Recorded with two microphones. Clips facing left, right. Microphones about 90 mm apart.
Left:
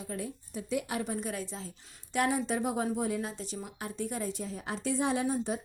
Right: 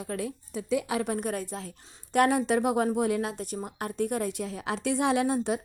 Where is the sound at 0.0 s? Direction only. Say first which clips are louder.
Right 5 dB; 80° right.